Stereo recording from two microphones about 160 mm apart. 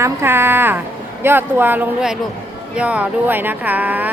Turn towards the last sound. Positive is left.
turn(degrees=-10)  # may be behind; listen again after turning